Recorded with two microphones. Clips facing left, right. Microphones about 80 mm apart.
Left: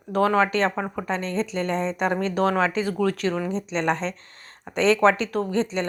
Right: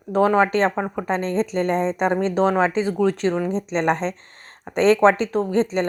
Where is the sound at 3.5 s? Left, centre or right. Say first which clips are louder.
Right 3 dB; right.